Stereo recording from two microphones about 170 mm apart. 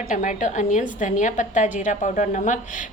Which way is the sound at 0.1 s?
45° left (ahead or behind).